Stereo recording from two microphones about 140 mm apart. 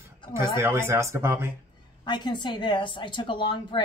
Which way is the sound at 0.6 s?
20° right (ahead or behind).